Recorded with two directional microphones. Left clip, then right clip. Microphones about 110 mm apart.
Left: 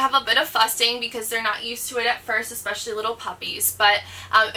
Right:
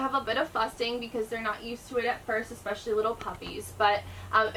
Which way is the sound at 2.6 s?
25° left (ahead or behind).